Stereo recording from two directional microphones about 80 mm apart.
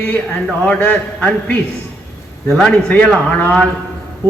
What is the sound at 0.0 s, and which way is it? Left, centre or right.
A man's voice, centre.